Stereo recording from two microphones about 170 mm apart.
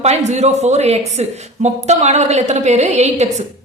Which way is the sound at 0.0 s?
40° right (ahead or behind).